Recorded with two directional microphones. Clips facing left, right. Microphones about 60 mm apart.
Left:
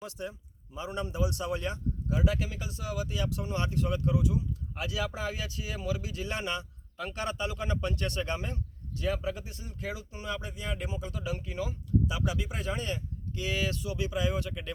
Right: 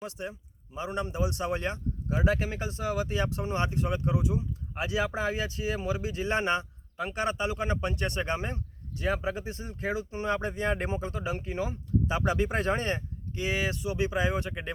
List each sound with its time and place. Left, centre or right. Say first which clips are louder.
0.0 s speech: right 2 dB; right
13.3 s speech: right 2 dB; right